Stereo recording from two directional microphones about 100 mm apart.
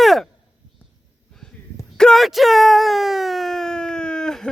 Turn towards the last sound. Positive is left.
turn(degrees=5)  # may be behind; listen again after turning